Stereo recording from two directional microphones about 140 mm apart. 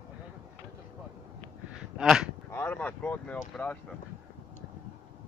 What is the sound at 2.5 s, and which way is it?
Speech, 15° left (ahead or behind).